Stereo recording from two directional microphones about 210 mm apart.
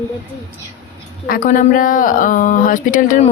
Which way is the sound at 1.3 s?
40° left (ahead or behind).